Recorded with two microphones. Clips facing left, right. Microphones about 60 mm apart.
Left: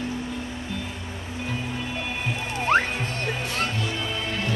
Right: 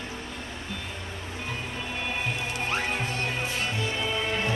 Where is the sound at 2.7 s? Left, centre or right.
Left.